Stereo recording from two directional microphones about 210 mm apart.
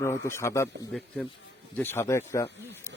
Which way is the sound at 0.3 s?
10° left (ahead or behind).